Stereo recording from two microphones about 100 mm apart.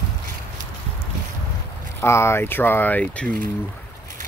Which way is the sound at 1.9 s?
25° left (ahead or behind).